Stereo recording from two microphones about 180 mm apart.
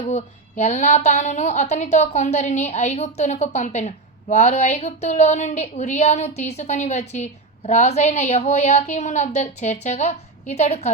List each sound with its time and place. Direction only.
0.1 s a woman's voice: 40° left (ahead or behind)